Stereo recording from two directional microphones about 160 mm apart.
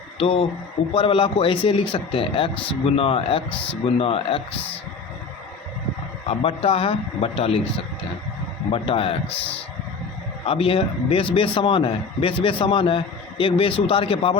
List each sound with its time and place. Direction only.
0.2 s a man's voice: 35° left (ahead or behind)
6.2 s a man's voice: 35° left (ahead or behind)
8.7 s a man's voice: 35° left (ahead or behind)
10.4 s a man's voice: 35° left (ahead or behind)